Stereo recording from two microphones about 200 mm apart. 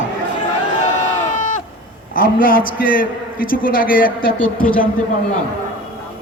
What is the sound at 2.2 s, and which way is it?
A man's voice, 45° left (ahead or behind).